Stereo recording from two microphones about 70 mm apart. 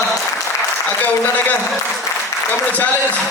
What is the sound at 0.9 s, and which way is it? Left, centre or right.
A man's voice, left.